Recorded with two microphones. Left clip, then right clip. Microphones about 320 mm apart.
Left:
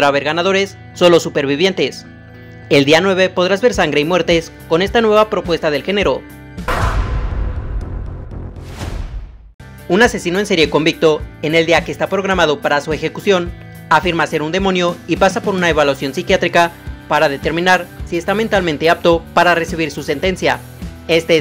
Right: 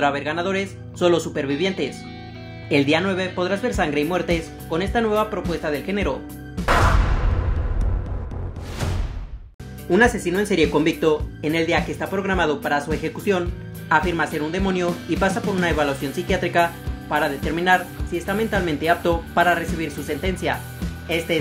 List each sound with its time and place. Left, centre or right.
0.0 s speech: left
6.6 s music: centre
9.8 s speech: left